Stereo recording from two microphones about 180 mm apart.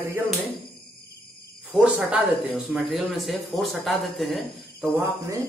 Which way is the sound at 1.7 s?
5° right (ahead or behind).